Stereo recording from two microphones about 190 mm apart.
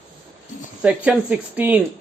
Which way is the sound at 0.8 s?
5° right (ahead or behind).